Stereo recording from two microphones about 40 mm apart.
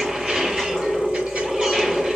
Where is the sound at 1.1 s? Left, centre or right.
Right.